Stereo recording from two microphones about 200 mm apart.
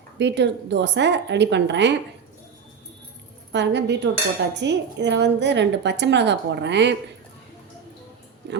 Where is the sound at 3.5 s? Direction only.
60° right (ahead or behind).